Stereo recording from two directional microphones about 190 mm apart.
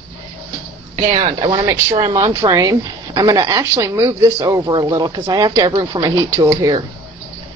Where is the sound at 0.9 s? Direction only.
30° right (ahead or behind).